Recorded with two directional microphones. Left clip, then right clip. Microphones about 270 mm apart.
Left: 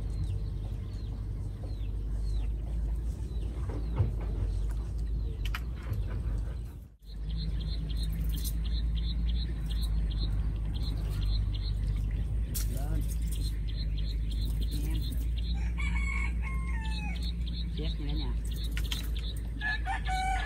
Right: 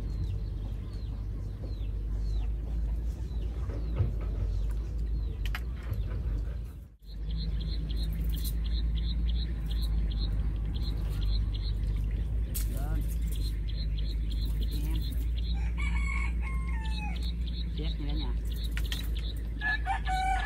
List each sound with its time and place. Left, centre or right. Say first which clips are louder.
14.7 s vehicle: left 1 dB; centre
15.8 s chicken: left 1 dB; centre
17.7 s a sound: even; centre
19.6 s chicken: right 2 dB; centre